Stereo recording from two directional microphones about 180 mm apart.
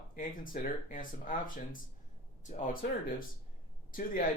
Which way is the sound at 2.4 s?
45° left (ahead or behind).